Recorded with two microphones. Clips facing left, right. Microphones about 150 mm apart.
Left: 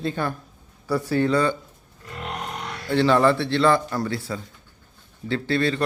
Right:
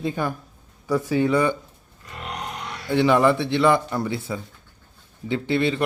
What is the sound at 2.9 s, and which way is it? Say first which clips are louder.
A man's voice: even; 15° right (ahead or behind).